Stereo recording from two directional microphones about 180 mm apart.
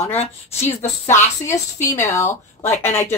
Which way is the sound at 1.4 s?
15° left (ahead or behind).